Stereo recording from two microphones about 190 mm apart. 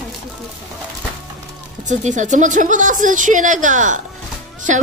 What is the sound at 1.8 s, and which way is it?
Speech, 40° right (ahead or behind).